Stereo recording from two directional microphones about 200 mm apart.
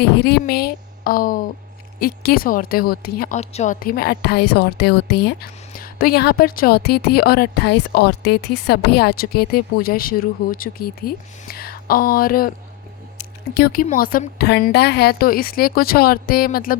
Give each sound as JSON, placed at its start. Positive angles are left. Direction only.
{"t": 0.0, "sound": "a woman's voice", "side_deg": 55}
{"t": 3.3, "sound": "a woman's voice", "side_deg": 35}
{"t": 13.1, "sound": "a sound", "side_deg": 50}
{"t": 13.8, "sound": "a woman's voice", "side_deg": 45}